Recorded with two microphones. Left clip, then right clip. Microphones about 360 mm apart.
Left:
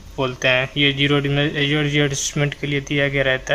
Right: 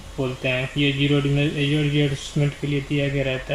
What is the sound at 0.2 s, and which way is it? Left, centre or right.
Speech, left.